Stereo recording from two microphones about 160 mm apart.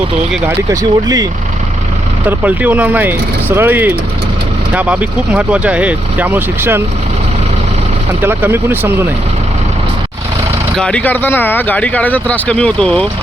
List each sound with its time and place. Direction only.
0.4 s speech: 20° right (ahead or behind)
2.2 s speech: 10° right (ahead or behind)
8.2 s speech: 15° right (ahead or behind)
10.8 s speech: 5° left (ahead or behind)